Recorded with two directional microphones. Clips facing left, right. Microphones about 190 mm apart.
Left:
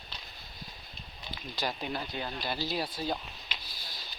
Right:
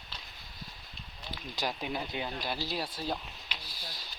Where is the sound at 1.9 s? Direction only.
15° right (ahead or behind).